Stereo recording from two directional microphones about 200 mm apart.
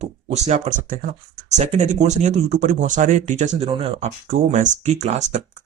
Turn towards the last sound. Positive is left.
turn(degrees=-35)  # may be behind; listen again after turning